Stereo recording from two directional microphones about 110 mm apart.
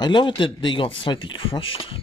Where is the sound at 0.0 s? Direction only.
45° left (ahead or behind).